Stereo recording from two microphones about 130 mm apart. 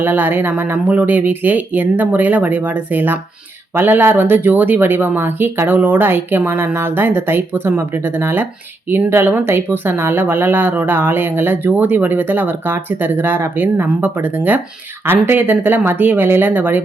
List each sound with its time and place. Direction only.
0.0 s speech: 15° right (ahead or behind)